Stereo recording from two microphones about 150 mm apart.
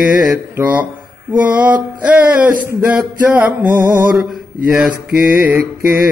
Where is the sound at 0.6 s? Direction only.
10° right (ahead or behind).